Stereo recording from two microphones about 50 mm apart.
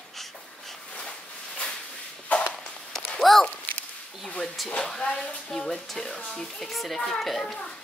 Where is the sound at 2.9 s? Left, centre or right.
Centre.